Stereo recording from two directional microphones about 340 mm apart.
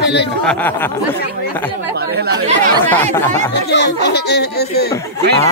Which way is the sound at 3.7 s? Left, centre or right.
Left.